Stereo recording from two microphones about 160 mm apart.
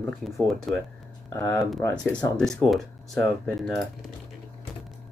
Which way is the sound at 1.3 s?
20° left (ahead or behind).